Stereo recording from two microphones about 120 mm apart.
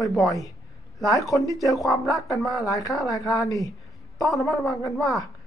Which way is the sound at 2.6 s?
30° left (ahead or behind).